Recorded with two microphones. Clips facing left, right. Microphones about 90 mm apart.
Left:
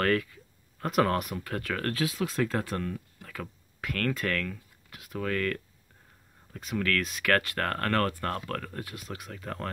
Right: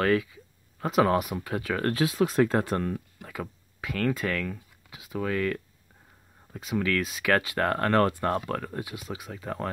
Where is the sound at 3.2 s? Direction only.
20° right (ahead or behind).